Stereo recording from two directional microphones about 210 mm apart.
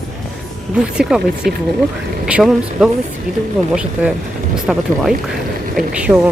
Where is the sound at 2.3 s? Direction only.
5° right (ahead or behind).